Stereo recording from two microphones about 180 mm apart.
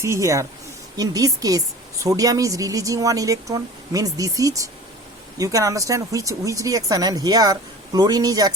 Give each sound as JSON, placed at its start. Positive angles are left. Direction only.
{"t": 0.0, "sound": "speech", "side_deg": -15}